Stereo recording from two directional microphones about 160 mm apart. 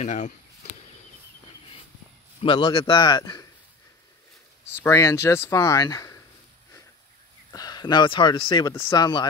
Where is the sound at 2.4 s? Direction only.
30° left (ahead or behind).